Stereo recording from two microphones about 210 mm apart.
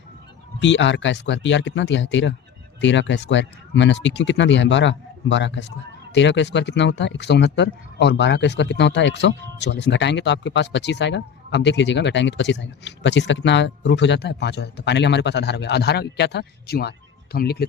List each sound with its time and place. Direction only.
0.6 s speech: 60° left (ahead or behind)